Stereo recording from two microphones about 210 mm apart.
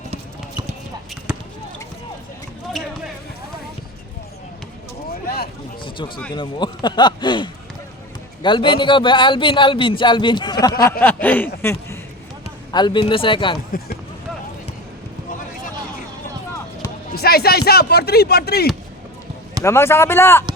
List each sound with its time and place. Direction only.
0.1 s clip-clop: 30° right (ahead or behind)
2.8 s basketball bounce: centre (ahead or behind)
6.3 s a man's voice: 20° left (ahead or behind)
11.0 s a man's voice: 10° left (ahead or behind)
12.7 s a man's voice: 20° left (ahead or behind)
17.2 s speech: 50° left (ahead or behind)
19.6 s a man's voice: 10° left (ahead or behind)